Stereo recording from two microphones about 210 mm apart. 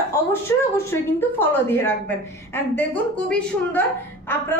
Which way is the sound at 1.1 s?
10° left (ahead or behind).